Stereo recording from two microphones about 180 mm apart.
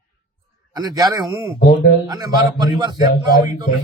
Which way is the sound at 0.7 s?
20° right (ahead or behind).